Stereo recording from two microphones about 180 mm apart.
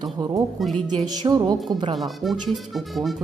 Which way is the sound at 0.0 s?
25° right (ahead or behind).